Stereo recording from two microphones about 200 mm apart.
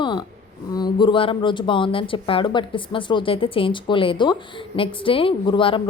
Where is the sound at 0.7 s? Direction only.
20° left (ahead or behind).